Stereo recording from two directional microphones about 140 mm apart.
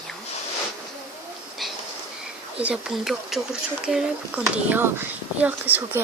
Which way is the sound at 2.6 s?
5° right (ahead or behind).